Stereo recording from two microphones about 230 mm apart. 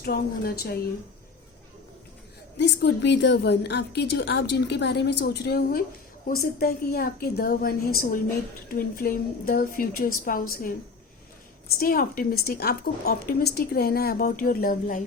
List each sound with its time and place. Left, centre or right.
0.0 s a woman's voice: left
2.6 s a woman's voice: left
11.8 s a woman's voice: left